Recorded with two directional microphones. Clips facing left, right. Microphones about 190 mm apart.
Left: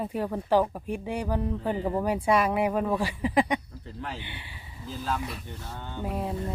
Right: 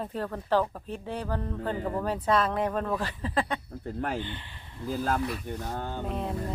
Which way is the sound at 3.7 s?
55° right (ahead or behind).